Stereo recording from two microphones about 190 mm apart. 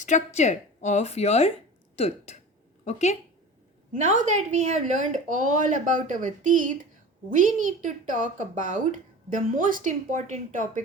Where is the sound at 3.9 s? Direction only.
40° right (ahead or behind).